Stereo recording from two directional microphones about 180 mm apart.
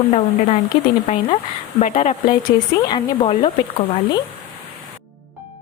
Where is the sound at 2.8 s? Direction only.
25° left (ahead or behind).